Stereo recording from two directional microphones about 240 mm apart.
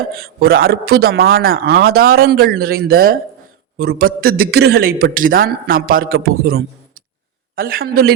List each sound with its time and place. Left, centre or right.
0.2 s a man's voice: right